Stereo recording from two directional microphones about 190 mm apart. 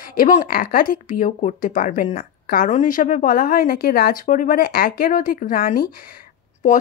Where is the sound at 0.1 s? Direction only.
50° left (ahead or behind).